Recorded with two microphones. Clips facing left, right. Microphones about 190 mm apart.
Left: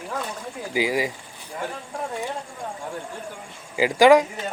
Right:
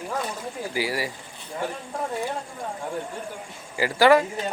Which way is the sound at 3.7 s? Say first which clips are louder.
Left 3 dB; 15° left (ahead or behind).